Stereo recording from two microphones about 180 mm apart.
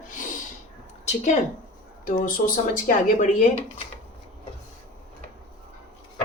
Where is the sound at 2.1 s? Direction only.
50° left (ahead or behind).